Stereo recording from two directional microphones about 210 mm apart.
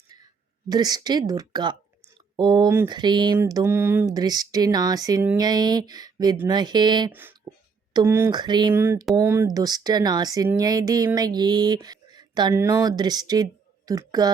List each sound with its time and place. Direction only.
0.7 s speech: 20° right (ahead or behind)
7.1 s speech: 10° right (ahead or behind)